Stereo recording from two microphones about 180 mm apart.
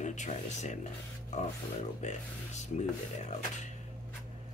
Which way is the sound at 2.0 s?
40° left (ahead or behind).